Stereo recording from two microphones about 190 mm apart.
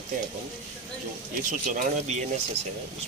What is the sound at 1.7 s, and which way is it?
Speech, 45° right (ahead or behind).